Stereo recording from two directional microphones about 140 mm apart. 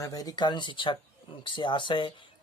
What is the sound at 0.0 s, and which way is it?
Speech, 25° left (ahead or behind).